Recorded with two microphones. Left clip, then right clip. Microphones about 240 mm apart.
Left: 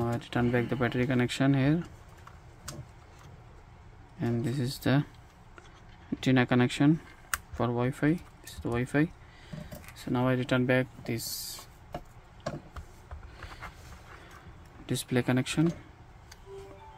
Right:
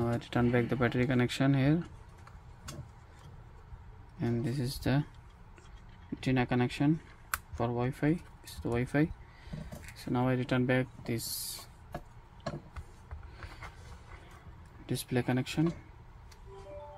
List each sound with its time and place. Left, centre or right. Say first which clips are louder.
0.0 s speech: left 1 dB; centre
4.2 s speech: left 2 dB; centre
6.1 s speech: left 5 dB; left; by 11.6 s centre
14.9 s speech: left 3 dB; centre